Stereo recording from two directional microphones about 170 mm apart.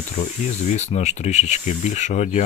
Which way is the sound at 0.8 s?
40° left (ahead or behind).